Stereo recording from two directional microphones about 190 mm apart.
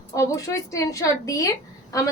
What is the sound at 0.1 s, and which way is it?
A woman's voice, 15° left (ahead or behind).